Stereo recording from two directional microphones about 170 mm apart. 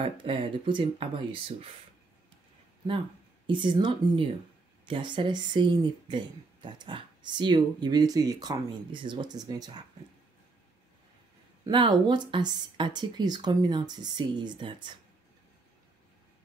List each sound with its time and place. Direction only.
0.0 s speech: 30° right (ahead or behind)
3.4 s speech: 25° right (ahead or behind)
11.6 s speech: 25° right (ahead or behind)